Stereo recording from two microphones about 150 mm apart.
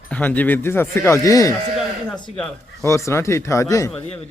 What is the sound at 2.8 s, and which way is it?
Speech, 20° left (ahead or behind).